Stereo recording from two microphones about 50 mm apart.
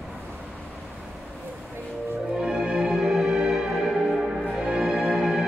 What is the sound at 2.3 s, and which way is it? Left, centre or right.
Music, centre.